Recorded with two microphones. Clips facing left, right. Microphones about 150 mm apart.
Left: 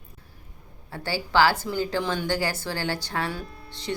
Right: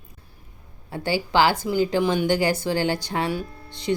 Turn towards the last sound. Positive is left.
turn(degrees=-15)  # may be behind; listen again after turning